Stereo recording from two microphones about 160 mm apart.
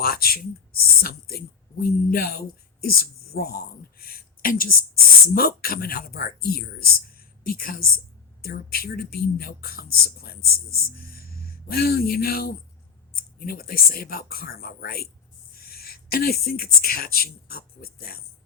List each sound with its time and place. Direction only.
0.0 s speech: 70° left (ahead or behind)